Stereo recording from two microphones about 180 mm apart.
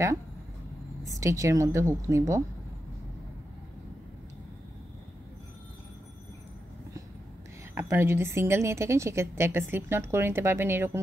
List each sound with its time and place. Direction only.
1.0 s a woman's voice: 15° right (ahead or behind)
7.7 s a woman's voice: 10° right (ahead or behind)